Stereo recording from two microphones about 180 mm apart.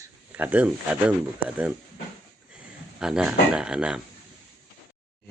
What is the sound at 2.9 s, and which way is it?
Speech, 5° right (ahead or behind).